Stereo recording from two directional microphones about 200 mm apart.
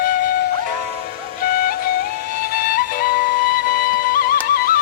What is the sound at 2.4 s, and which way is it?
Flute, 45° left (ahead or behind).